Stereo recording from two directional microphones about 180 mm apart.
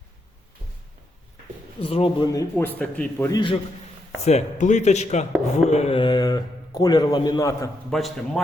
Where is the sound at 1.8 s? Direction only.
30° left (ahead or behind).